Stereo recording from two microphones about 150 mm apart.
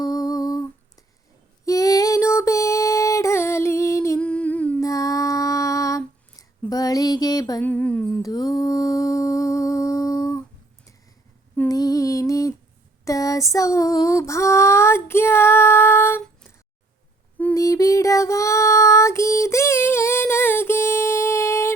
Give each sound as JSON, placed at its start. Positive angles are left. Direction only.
{"t": 0.0, "sound": "humming", "side_deg": 25}
{"t": 1.6, "sound": "female singing", "side_deg": 25}
{"t": 4.2, "sound": "humming", "side_deg": 5}
{"t": 4.8, "sound": "music", "side_deg": 20}
{"t": 6.7, "sound": "a sound", "side_deg": 25}
{"t": 7.6, "sound": "music", "side_deg": 10}
{"t": 8.2, "sound": "humming", "side_deg": 25}
{"t": 11.7, "sound": "music", "side_deg": 25}
{"t": 13.1, "sound": "female singing", "side_deg": 20}
{"t": 17.5, "sound": "child singing", "side_deg": 20}